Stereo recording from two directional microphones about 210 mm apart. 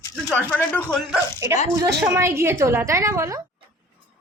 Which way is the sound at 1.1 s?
15° right (ahead or behind).